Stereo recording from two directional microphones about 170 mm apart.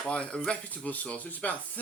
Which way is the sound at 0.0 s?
5° left (ahead or behind).